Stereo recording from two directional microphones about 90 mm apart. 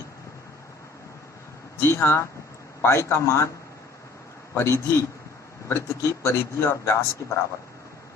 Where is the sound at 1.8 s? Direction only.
25° left (ahead or behind).